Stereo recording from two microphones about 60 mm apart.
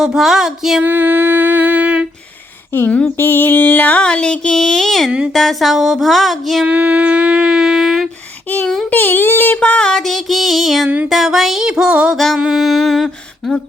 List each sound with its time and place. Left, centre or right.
0.0 s music: centre
0.8 s music: right
2.7 s music: left
4.0 s child singing: centre
5.3 s a sound: centre
6.7 s music: right; by 8.1 s centre
8.6 s a sound: centre
8.9 s music: left
9.6 s child singing: centre
9.9 s a sound: centre
10.8 s music: right
11.1 s music: centre
12.1 s a sound: centre